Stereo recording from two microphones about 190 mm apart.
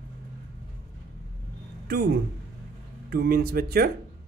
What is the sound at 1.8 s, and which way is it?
A woman's voice, 55° right (ahead or behind).